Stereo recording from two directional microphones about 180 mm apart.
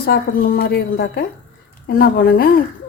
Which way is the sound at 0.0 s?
55° left (ahead or behind).